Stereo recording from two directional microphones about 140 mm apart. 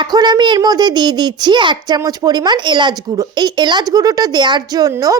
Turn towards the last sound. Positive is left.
turn(degrees=-25)  # may be behind; listen again after turning